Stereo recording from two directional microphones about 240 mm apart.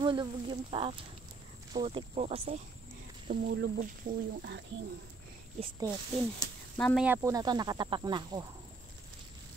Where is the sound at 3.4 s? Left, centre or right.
Right.